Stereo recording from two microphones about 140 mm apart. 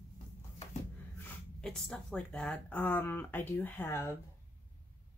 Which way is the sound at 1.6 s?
5° left (ahead or behind).